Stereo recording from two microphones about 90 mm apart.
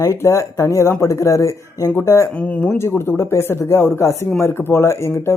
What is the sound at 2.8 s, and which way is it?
Speech, 25° left (ahead or behind).